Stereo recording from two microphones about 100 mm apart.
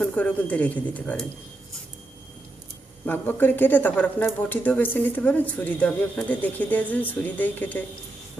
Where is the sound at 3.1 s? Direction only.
20° left (ahead or behind).